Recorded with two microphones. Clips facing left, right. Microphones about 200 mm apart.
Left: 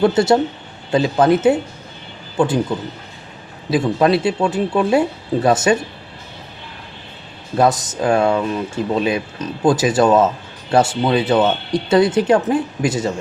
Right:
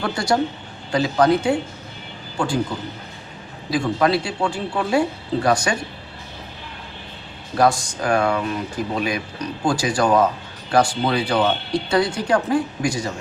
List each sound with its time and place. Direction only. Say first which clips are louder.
0.0 s speech: left 7 dB; 25° left (ahead or behind)
3.7 s speech: left 4 dB; 25° left (ahead or behind)
7.6 s speech: left 2 dB; 20° left (ahead or behind)